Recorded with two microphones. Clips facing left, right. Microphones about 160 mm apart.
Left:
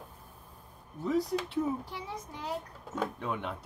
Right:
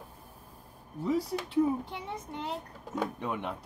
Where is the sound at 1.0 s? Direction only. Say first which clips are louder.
Even; 10° right (ahead or behind).